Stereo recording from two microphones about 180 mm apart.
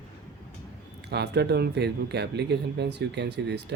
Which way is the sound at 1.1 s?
70° right (ahead or behind).